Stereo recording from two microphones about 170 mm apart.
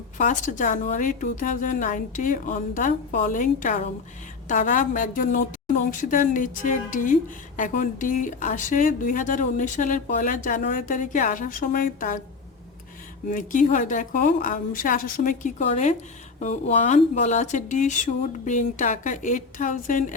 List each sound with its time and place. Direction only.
0.2 s a woman's voice: 50° left (ahead or behind)
13.3 s a woman's voice: 50° left (ahead or behind)